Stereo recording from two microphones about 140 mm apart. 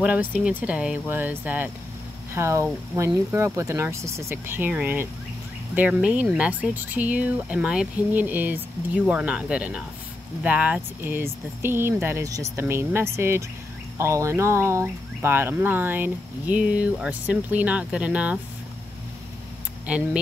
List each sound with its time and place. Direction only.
0.0 s speech: 10° right (ahead or behind)
19.9 s speech: 10° right (ahead or behind)